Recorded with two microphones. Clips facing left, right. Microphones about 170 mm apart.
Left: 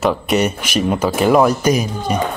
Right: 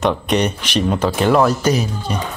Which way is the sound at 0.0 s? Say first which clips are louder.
Left 1 dB; 5° left (ahead or behind).